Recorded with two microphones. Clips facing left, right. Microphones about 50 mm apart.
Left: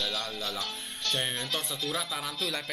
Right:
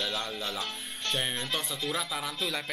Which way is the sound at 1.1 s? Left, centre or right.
Centre.